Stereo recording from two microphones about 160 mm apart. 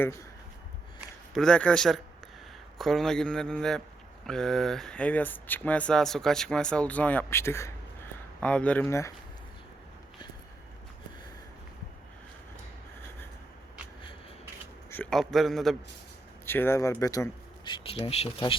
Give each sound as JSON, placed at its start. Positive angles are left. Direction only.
{"t": 0.0, "sound": "speech", "side_deg": 20}
{"t": 1.3, "sound": "a man's voice", "side_deg": 5}
{"t": 14.8, "sound": "a sound", "side_deg": 10}
{"t": 15.1, "sound": "a man's voice", "side_deg": 0}
{"t": 16.5, "sound": "speech", "side_deg": 15}
{"t": 17.7, "sound": "speech", "side_deg": 35}